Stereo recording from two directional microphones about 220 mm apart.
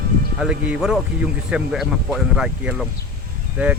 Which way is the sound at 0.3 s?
5° right (ahead or behind).